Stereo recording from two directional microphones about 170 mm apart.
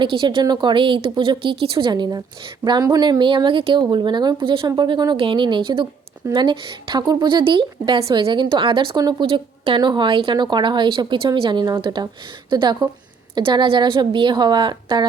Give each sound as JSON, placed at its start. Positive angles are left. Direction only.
{"t": 0.2, "sound": "speech", "side_deg": -30}